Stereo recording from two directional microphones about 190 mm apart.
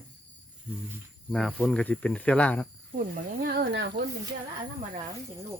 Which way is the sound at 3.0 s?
55° right (ahead or behind).